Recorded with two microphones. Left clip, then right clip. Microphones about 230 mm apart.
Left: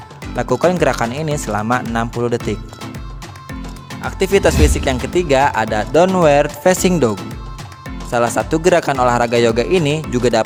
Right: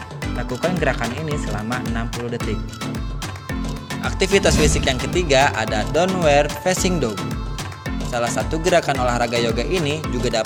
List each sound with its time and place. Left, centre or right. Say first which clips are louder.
0.3 s speech: left 9 dB; left
4.0 s speech: left 3 dB; left
8.1 s speech: left 7 dB; left